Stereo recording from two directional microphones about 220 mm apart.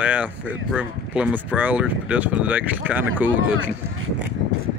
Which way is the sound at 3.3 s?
60° right (ahead or behind).